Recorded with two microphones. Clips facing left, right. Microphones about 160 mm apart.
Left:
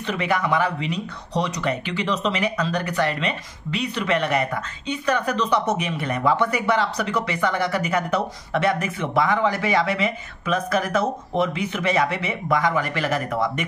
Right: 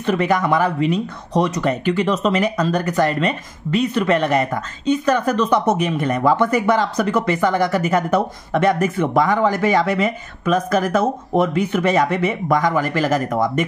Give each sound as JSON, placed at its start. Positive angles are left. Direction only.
{"t": 0.0, "sound": "speech", "side_deg": -45}